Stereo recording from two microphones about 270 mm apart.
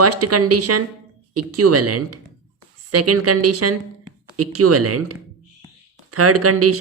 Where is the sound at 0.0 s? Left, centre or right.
Right.